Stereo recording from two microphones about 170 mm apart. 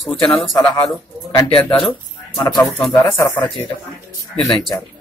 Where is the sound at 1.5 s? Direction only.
30° left (ahead or behind).